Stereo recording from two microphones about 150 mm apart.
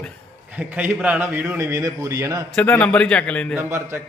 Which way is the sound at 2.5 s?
10° left (ahead or behind).